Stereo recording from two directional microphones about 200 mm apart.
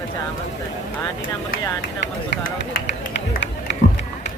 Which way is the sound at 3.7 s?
60° left (ahead or behind).